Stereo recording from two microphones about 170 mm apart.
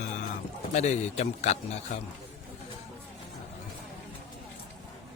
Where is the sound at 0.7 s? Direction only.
40° left (ahead or behind).